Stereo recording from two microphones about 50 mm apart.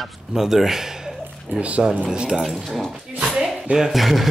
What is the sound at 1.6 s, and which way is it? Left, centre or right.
Speech, right.